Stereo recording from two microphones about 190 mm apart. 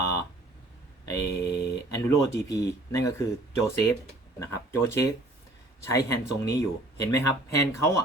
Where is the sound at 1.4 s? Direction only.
60° left (ahead or behind).